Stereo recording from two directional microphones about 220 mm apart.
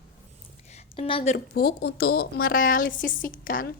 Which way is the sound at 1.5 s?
45° left (ahead or behind).